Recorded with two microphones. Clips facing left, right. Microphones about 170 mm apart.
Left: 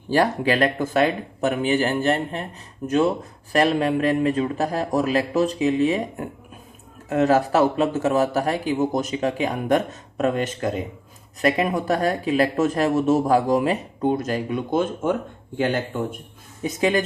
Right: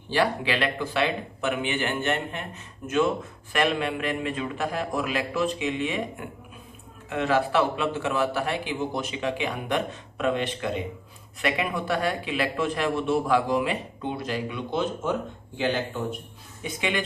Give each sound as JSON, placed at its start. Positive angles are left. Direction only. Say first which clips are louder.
{"t": 0.1, "sound": "speech", "louder": "left 5 dB", "side_deg": 45}